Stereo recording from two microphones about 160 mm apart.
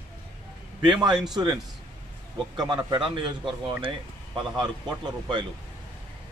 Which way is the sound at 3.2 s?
30° right (ahead or behind).